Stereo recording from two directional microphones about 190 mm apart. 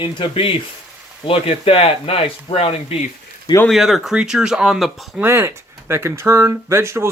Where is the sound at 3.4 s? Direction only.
15° left (ahead or behind).